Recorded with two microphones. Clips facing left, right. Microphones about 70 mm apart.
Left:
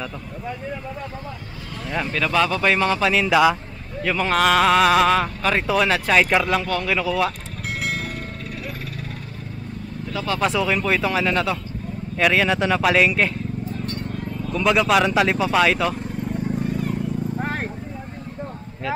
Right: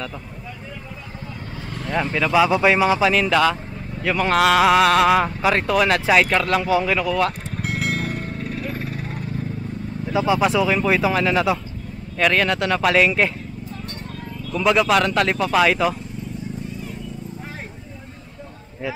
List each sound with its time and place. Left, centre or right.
2.1 s a man's voice: centre
4.0 s speech: centre
6.6 s speech: centre
7.6 s music: centre
8.1 s music: right
10.1 s a man's voice: centre
10.4 s speech: centre
14.5 s speech: centre
16.3 s a sound: left
17.4 s horse: left